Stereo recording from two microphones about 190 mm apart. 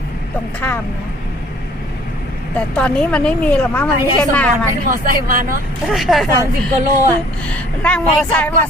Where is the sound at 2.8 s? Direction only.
5° left (ahead or behind).